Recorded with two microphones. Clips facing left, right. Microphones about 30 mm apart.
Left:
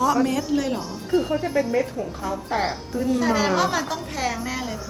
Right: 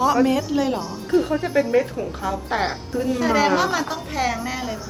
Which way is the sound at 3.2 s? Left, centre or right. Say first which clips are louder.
Right 3 dB; centre.